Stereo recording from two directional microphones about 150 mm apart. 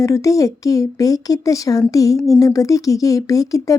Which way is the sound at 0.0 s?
20° left (ahead or behind).